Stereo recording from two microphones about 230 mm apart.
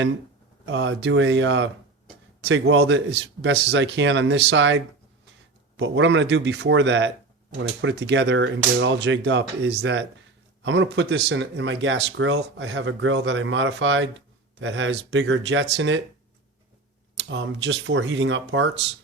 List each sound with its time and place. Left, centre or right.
0.6 s speech: right
17.2 s speech: right